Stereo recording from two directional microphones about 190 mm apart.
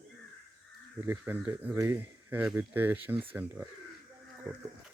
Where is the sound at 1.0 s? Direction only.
10° right (ahead or behind).